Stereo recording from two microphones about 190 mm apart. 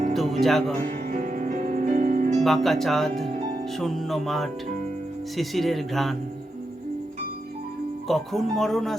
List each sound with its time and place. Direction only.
0.1 s music: centre (ahead or behind)
1.1 s music: 45° right (ahead or behind)
2.4 s speech: centre (ahead or behind)
8.0 s speech: centre (ahead or behind)